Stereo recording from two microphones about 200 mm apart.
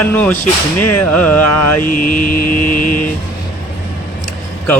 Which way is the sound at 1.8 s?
45° left (ahead or behind).